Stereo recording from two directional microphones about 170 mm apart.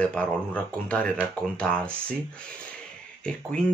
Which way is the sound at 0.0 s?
5° left (ahead or behind).